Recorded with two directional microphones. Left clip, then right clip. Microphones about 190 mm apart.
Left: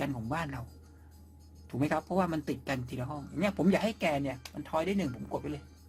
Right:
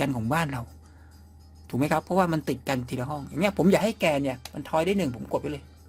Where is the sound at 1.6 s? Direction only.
40° right (ahead or behind).